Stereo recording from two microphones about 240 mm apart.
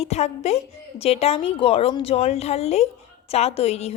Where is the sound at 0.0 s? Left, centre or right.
Left.